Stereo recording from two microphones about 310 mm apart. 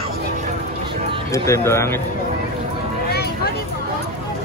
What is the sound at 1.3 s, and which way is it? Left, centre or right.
Speech, centre.